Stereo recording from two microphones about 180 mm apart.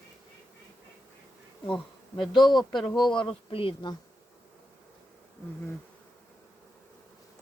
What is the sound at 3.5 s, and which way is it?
Speech, 30° left (ahead or behind).